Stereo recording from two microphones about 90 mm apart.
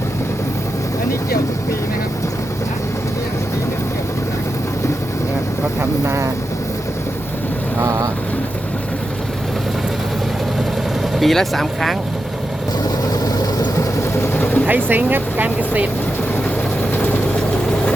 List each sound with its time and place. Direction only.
7.8 s speech: 40° right (ahead or behind)
11.1 s speech: centre (ahead or behind)
13.2 s vehicle: 45° left (ahead or behind)
14.3 s vehicle: 15° left (ahead or behind)
14.7 s speech: 20° right (ahead or behind)
16.9 s vehicle: 20° left (ahead or behind)